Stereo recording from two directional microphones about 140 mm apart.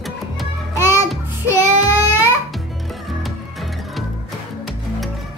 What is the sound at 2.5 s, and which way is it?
Music, centre (ahead or behind).